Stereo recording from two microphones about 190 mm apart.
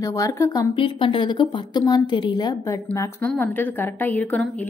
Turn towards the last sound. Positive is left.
turn(degrees=5)  # may be behind; listen again after turning